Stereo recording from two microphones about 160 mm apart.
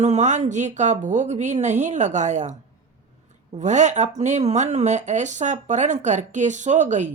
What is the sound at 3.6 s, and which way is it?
Speech, 50° right (ahead or behind).